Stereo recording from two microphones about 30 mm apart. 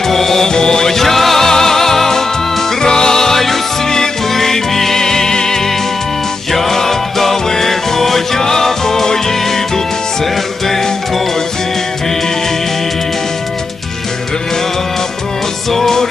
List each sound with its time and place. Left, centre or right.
0.1 s music: centre
0.4 s music: left
0.9 s music: centre
15.7 s music: centre